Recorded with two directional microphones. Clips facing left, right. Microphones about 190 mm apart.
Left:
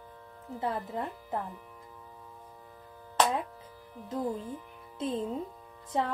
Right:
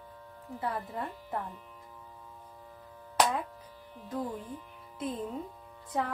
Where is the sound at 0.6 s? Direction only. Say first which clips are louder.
Left 2 dB; 25° left (ahead or behind).